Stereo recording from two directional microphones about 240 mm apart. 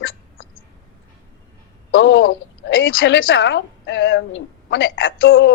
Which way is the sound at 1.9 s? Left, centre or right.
Left.